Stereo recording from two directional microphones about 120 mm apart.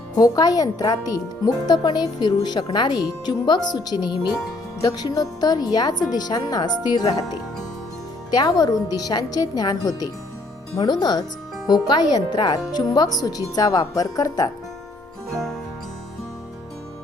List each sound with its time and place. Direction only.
0.2 s speech: 30° left (ahead or behind)